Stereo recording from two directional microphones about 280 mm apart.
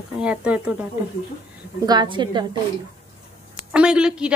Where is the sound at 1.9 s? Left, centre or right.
Centre.